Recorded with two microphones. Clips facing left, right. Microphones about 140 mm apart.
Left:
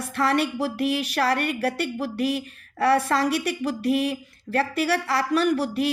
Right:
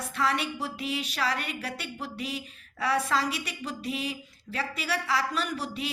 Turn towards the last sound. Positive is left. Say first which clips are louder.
# left 10 dB
turn(degrees=70)  # may be behind; listen again after turning